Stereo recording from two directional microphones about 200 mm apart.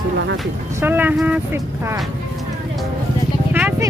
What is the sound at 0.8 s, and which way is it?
Speech, 10° right (ahead or behind).